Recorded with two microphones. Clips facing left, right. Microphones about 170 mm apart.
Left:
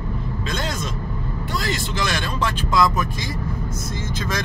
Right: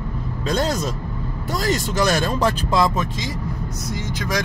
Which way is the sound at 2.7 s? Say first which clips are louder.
Left 2 dB; 25° right (ahead or behind).